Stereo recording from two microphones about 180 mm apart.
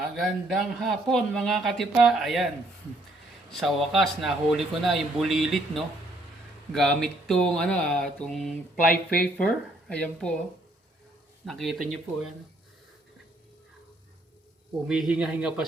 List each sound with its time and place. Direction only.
0.2 s speech: centre (ahead or behind)
3.5 s speech: centre (ahead or behind)
11.4 s speech: centre (ahead or behind)
14.8 s speech: 5° right (ahead or behind)